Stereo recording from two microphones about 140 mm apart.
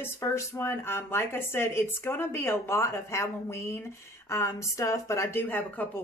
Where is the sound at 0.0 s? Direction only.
20° left (ahead or behind).